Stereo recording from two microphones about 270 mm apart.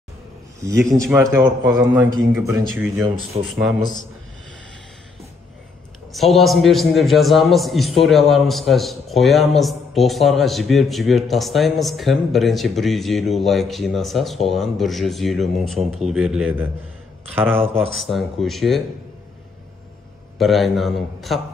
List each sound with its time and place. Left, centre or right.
0.6 s a man's voice: centre
3.3 s speech: right
6.1 s a man's voice: centre
17.9 s a man's voice: centre
20.3 s a man's voice: centre